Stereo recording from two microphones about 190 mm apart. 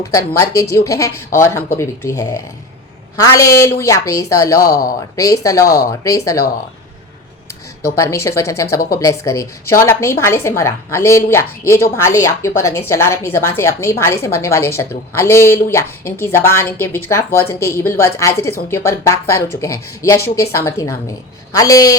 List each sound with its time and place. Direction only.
0.1 s a woman's voice: 15° left (ahead or behind)
4.6 s speech: 50° left (ahead or behind)
5.1 s a woman's voice: 15° left (ahead or behind)
7.9 s a woman's voice: 15° left (ahead or behind)